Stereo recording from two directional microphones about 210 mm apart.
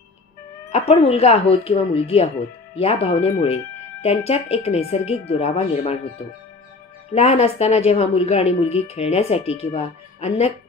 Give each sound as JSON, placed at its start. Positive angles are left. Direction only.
{"t": 0.7, "sound": "speech", "side_deg": 30}
{"t": 7.2, "sound": "speech", "side_deg": 30}